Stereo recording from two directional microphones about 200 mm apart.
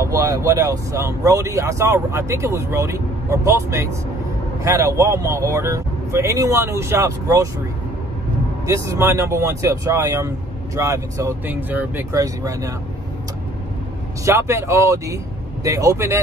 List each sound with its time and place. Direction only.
0.0 s speech: 15° right (ahead or behind)
8.6 s speech: 15° right (ahead or behind)
14.2 s speech: 15° right (ahead or behind)